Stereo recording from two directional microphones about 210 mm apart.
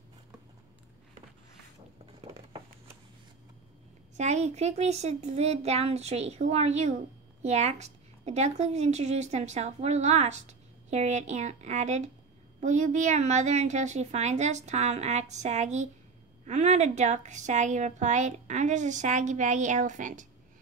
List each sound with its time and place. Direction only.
4.2 s a woman's voice: 30° right (ahead or behind)